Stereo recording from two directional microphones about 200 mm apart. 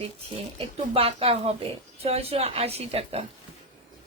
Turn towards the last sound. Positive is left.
turn(degrees=-30)  # may be behind; listen again after turning